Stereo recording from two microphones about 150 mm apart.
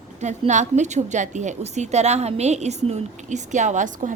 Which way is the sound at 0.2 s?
50° right (ahead or behind).